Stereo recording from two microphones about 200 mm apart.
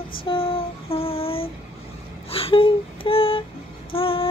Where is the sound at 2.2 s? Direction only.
30° left (ahead or behind).